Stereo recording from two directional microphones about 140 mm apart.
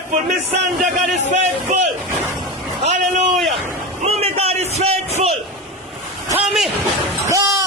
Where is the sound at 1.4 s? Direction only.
55° right (ahead or behind).